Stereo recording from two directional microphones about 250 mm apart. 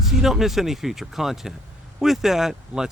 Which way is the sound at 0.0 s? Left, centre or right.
Centre.